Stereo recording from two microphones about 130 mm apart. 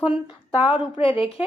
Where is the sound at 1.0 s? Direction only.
40° left (ahead or behind).